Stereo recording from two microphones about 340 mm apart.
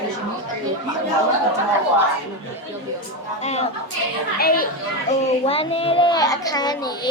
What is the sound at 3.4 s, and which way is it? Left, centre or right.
A woman's voice, centre.